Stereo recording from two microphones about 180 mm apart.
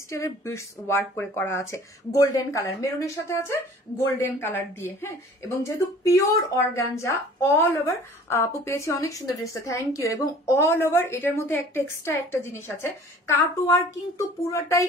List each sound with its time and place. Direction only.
0.1 s speech: 15° left (ahead or behind)